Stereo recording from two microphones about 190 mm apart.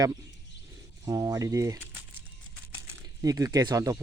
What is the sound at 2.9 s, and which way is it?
Speech, 20° right (ahead or behind).